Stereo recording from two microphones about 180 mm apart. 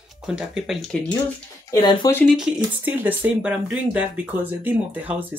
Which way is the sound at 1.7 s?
20° left (ahead or behind).